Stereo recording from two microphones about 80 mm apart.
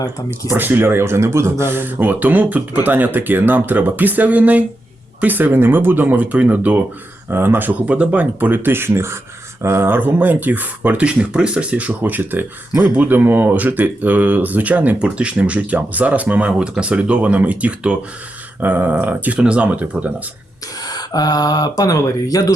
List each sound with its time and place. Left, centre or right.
0.5 s speech: right
20.8 s speech: left